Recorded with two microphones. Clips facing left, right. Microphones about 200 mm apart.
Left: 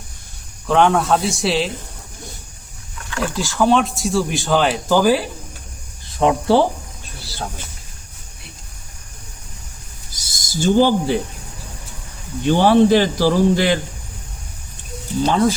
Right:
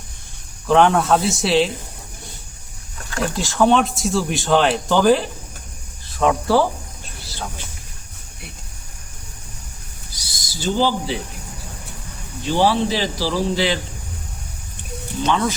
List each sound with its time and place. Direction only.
0.7 s speech: centre (ahead or behind)
3.3 s speech: centre (ahead or behind)
6.1 s speech: 25° left (ahead or behind)
10.2 s owl: 45° left (ahead or behind)
12.4 s speech: 55° left (ahead or behind)
15.2 s speech: 35° left (ahead or behind)